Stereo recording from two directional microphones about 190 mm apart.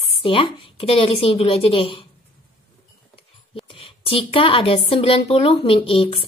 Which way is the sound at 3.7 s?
30° left (ahead or behind).